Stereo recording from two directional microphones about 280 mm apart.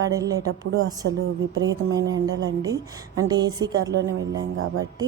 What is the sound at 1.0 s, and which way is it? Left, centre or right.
Speech, right.